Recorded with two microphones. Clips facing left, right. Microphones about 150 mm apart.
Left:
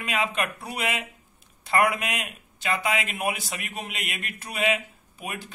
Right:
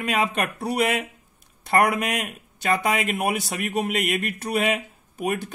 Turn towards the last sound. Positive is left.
turn(degrees=-50)  # may be behind; listen again after turning